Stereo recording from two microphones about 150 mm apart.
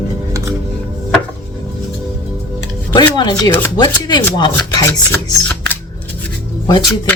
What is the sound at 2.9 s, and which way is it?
Speech, 30° left (ahead or behind).